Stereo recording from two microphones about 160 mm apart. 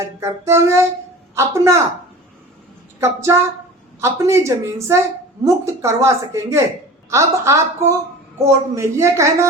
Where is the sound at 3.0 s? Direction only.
15° right (ahead or behind).